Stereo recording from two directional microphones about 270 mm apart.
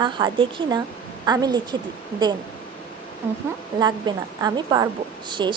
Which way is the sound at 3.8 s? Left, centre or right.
Centre.